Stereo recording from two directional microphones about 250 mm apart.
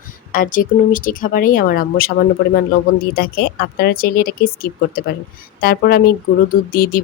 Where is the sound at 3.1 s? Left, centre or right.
Left.